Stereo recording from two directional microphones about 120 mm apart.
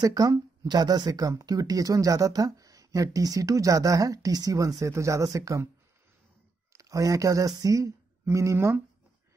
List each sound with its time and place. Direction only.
0.0 s speech: 30° right (ahead or behind)
6.7 s speech: 30° right (ahead or behind)